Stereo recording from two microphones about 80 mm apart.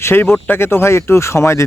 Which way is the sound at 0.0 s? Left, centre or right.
Left.